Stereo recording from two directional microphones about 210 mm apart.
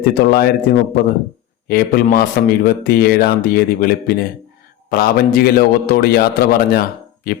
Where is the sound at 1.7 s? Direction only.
45° left (ahead or behind).